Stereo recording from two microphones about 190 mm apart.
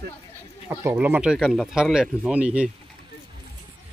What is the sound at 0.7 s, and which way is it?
Speech, 10° right (ahead or behind).